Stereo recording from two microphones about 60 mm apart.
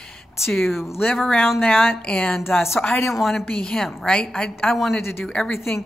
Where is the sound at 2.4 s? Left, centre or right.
Left.